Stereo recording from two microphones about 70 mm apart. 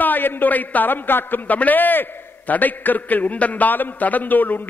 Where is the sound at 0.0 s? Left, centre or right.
Left.